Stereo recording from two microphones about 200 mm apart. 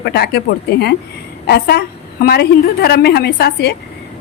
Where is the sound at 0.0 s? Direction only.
55° left (ahead or behind).